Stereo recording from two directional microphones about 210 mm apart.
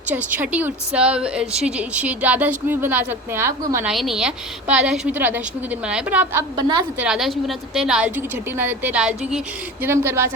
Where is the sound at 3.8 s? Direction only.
Centre (ahead or behind).